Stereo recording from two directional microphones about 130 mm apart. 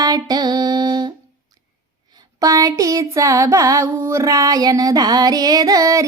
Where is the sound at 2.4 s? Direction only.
25° right (ahead or behind).